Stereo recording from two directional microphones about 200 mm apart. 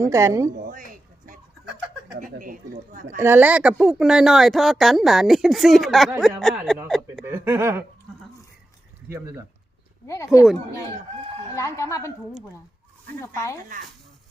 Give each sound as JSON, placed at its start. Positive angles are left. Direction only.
{"t": 0.0, "sound": "speech", "side_deg": -15}
{"t": 0.5, "sound": "a sound", "side_deg": -40}
{"t": 2.1, "sound": "speech", "side_deg": -40}
{"t": 3.2, "sound": "speech", "side_deg": -10}
{"t": 7.3, "sound": "speech", "side_deg": -10}
{"t": 9.0, "sound": "speech", "side_deg": -10}
{"t": 10.3, "sound": "speech", "side_deg": 0}
{"t": 11.5, "sound": "speech", "side_deg": 15}
{"t": 13.2, "sound": "speech", "side_deg": 15}